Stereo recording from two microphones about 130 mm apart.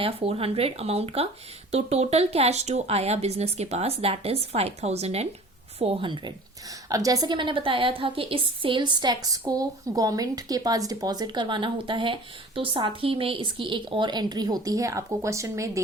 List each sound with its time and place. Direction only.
0.0 s speech: 45° right (ahead or behind); by 15.8 s 25° right (ahead or behind)